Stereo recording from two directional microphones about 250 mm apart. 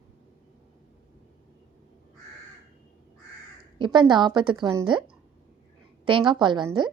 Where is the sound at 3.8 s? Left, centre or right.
Centre.